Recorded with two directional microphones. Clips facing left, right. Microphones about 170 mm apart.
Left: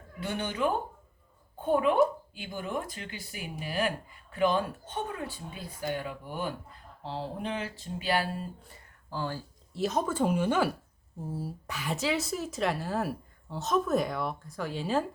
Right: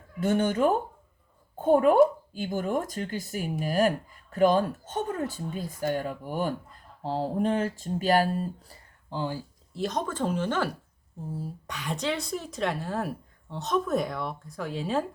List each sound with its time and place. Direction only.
0.2 s speech: 45° right (ahead or behind)
9.0 s speech: 15° right (ahead or behind)
9.7 s speech: 5° left (ahead or behind)